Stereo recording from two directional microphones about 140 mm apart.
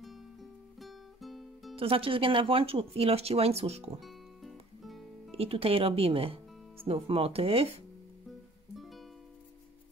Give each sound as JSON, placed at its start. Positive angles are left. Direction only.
{"t": 0.0, "sound": "music", "side_deg": 0}
{"t": 1.8, "sound": "speech", "side_deg": -40}
{"t": 4.0, "sound": "music", "side_deg": 0}
{"t": 5.3, "sound": "speech", "side_deg": -45}
{"t": 8.7, "sound": "music", "side_deg": 0}